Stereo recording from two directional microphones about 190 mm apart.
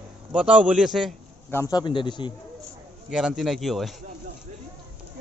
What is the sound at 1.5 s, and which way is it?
Speech, 15° left (ahead or behind).